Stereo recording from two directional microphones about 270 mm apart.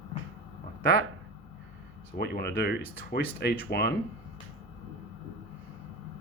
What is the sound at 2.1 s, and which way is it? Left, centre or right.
Speech, left.